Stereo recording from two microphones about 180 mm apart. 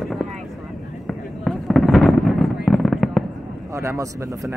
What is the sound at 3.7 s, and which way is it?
Speech, 15° right (ahead or behind).